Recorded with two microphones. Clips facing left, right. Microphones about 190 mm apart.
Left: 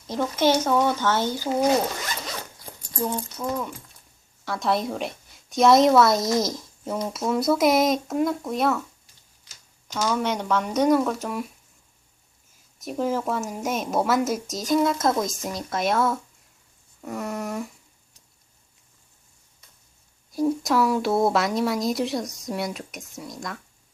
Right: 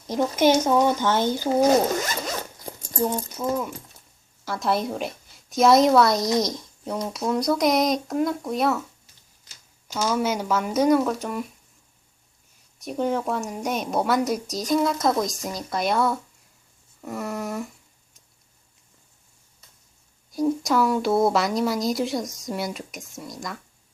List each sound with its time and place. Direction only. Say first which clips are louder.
0.1 s speech: right 2 dB; 15° right (ahead or behind)
3.0 s a woman's voice: right 2 dB; 10° right (ahead or behind)
9.9 s a woman's voice: right 1 dB; 5° right (ahead or behind)
12.8 s a woman's voice: right 1 dB; centre (ahead or behind)
20.3 s a woman's voice: even; centre (ahead or behind)